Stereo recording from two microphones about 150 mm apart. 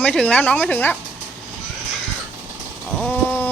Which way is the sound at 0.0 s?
5° left (ahead or behind).